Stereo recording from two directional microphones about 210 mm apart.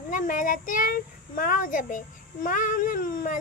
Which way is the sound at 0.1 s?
40° left (ahead or behind).